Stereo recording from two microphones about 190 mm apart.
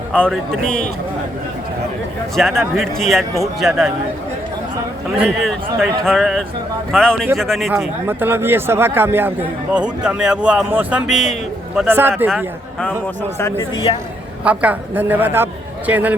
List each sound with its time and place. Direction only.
0.1 s speech: 5° left (ahead or behind)
2.3 s speech: centre (ahead or behind)
5.1 s speech: centre (ahead or behind)
8.0 s a man's voice: 10° right (ahead or behind)
11.8 s a man's voice: 10° right (ahead or behind)
13.9 s a man's voice: 25° left (ahead or behind)
14.4 s a man's voice: 5° right (ahead or behind)